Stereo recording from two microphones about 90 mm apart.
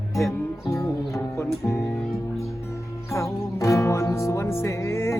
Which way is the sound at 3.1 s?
35° left (ahead or behind).